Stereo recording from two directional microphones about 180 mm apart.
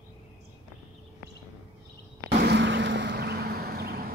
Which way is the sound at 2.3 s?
70° right (ahead or behind).